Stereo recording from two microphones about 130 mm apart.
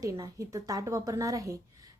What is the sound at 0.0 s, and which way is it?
A woman's voice, 25° right (ahead or behind).